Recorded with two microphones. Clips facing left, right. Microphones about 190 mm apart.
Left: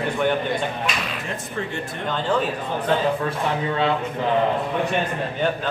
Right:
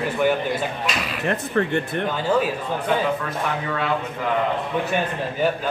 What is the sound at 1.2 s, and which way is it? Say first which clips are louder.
Speech: right 7 dB; 60° right (ahead or behind).